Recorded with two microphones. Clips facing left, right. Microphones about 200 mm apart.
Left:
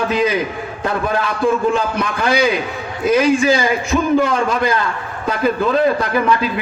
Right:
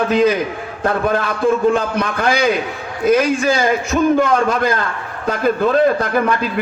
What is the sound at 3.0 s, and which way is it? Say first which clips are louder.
Music: even; 55° right (ahead or behind).